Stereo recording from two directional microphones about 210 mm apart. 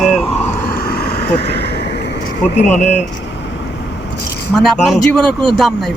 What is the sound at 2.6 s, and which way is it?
Speech, 35° left (ahead or behind).